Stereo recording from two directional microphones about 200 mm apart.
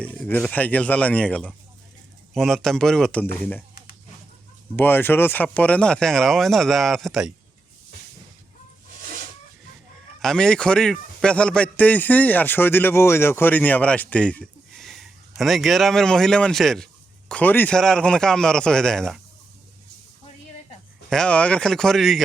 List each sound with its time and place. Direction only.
0.0 s a man's voice: 5° left (ahead or behind)
4.8 s speech: 10° left (ahead or behind)
10.2 s a man's voice: 5° left (ahead or behind)
21.1 s speech: 5° left (ahead or behind)